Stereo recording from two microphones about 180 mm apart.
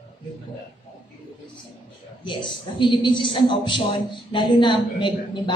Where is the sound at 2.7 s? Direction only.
25° left (ahead or behind).